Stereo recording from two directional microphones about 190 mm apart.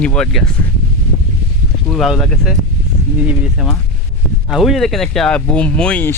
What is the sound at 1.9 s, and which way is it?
Speech, centre (ahead or behind).